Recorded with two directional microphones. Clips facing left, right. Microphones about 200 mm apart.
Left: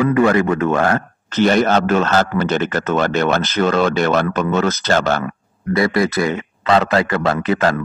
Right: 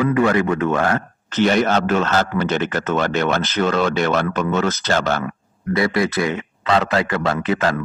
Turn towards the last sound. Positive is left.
turn(degrees=40)  # may be behind; listen again after turning